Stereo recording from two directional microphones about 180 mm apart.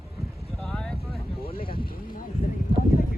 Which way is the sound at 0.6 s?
5° left (ahead or behind).